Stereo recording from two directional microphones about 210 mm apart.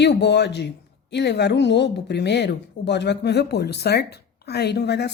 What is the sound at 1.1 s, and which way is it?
A woman's voice, 55° left (ahead or behind).